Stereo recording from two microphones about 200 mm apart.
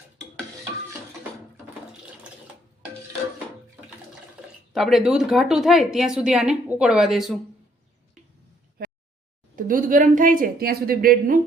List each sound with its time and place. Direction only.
4.4 s speech: centre (ahead or behind)
9.6 s a woman's voice: 45° right (ahead or behind)